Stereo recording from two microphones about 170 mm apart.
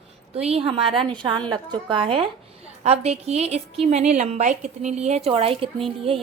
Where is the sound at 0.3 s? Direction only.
35° right (ahead or behind).